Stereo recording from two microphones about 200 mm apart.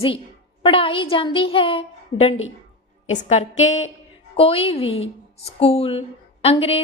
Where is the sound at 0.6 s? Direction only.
25° left (ahead or behind).